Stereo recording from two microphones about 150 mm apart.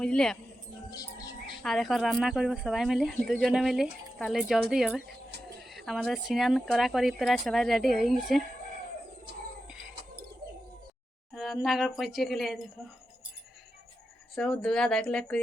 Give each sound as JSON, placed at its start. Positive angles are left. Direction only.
{"t": 0.0, "sound": "speech", "side_deg": 5}
{"t": 0.9, "sound": "music", "side_deg": 25}
{"t": 1.6, "sound": "speech", "side_deg": 0}
{"t": 11.3, "sound": "speech", "side_deg": 0}
{"t": 14.3, "sound": "speech", "side_deg": 5}